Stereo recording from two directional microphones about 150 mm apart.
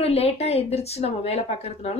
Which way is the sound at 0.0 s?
40° left (ahead or behind).